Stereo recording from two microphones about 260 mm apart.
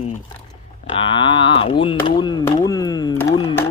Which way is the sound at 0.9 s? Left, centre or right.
Centre.